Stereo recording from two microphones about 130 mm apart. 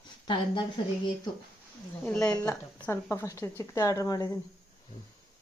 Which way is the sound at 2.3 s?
25° left (ahead or behind).